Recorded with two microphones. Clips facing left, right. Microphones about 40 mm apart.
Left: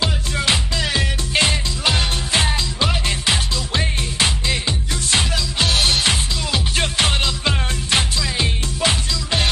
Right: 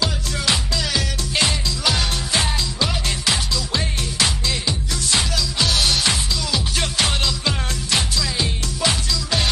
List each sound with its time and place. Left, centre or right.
0.0 s music: left